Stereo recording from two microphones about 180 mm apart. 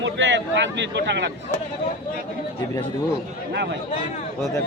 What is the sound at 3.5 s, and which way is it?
Speech, 75° right (ahead or behind).